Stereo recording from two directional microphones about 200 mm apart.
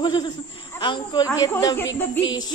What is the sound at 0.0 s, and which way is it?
A man's voice, 20° left (ahead or behind).